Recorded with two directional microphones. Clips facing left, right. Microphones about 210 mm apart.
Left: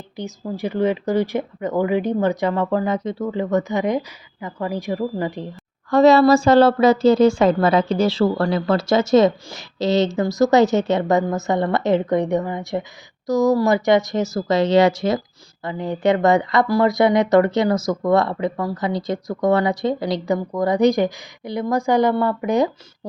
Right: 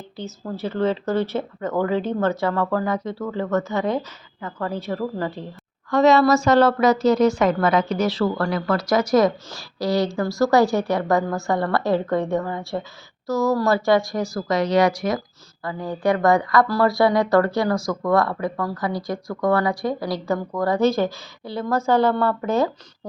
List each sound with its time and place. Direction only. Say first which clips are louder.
0.2 s speech: left 3 dB; 15° left (ahead or behind)
5.9 s speech: left 3 dB; 35° left (ahead or behind); by 22.7 s 15° left (ahead or behind)